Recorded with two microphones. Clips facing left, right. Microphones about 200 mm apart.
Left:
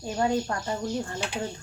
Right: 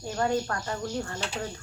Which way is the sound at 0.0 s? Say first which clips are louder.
Left 1 dB; 15° left (ahead or behind).